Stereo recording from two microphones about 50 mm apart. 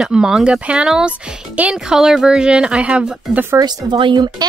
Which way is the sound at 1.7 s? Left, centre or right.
Centre.